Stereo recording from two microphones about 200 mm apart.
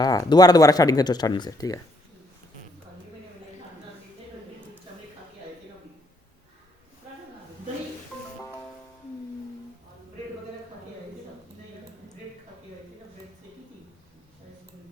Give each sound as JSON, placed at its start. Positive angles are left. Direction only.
{"t": 0.0, "sound": "speech", "side_deg": 20}